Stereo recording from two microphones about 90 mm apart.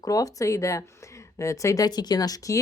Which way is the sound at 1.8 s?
50° left (ahead or behind).